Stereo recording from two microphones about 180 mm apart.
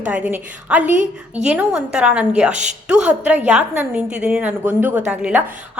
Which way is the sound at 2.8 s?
5° right (ahead or behind).